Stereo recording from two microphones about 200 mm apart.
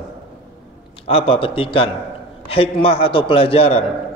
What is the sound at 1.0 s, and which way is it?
A man's voice, 30° left (ahead or behind).